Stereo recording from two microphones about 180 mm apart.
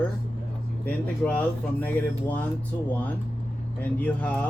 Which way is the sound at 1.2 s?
5° left (ahead or behind).